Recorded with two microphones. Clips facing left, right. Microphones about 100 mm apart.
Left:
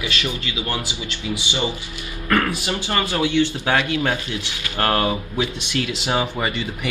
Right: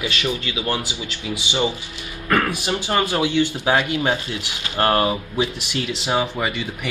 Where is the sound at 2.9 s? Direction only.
25° right (ahead or behind).